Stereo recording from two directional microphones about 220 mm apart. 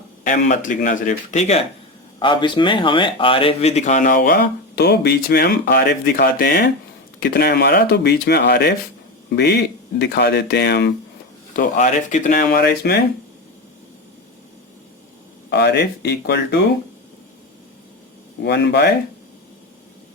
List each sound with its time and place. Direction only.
0.3 s speech: 35° left (ahead or behind)
2.1 s speech: 20° left (ahead or behind); by 10.9 s 50° left (ahead or behind)
11.5 s speech: 35° left (ahead or behind)
15.4 s speech: 50° left (ahead or behind)
18.4 s speech: 50° left (ahead or behind)